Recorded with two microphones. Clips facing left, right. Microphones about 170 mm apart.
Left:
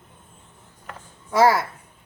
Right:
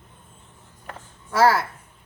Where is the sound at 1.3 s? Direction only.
20° left (ahead or behind).